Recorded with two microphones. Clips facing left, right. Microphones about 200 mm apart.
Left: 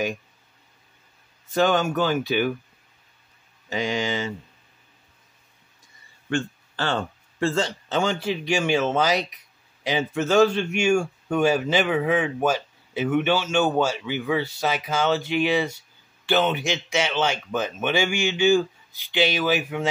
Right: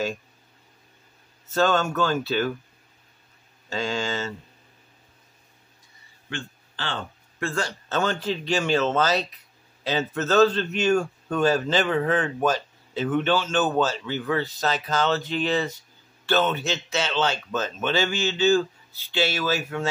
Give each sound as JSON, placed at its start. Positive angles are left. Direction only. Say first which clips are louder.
{"t": 1.5, "sound": "a man's voice", "louder": "left 1 dB", "side_deg": 15}
{"t": 3.7, "sound": "a man's voice", "louder": "left 2 dB", "side_deg": 15}
{"t": 6.3, "sound": "speech", "louder": "left 9 dB", "side_deg": 45}
{"t": 7.3, "sound": "a man's voice", "louder": "left 5 dB", "side_deg": 25}